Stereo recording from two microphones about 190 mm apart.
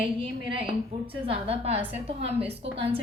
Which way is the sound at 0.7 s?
30° right (ahead or behind).